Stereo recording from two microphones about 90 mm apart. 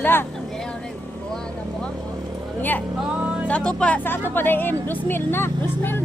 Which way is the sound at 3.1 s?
15° right (ahead or behind).